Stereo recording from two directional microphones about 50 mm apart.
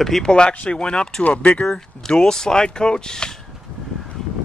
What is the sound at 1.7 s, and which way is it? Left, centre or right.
Speech, centre.